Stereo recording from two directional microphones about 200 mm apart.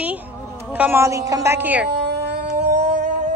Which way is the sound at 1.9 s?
60° right (ahead or behind).